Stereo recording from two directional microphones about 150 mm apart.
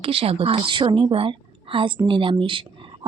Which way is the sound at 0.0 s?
35° right (ahead or behind).